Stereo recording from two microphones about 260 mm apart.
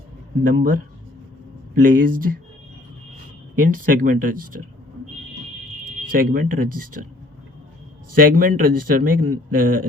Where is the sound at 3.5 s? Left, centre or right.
Right.